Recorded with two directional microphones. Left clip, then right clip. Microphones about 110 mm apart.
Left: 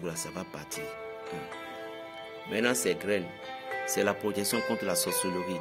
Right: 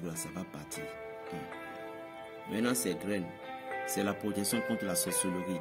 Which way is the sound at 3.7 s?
30° left (ahead or behind).